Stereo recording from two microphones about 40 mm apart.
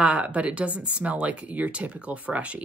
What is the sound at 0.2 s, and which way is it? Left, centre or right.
Speech, right.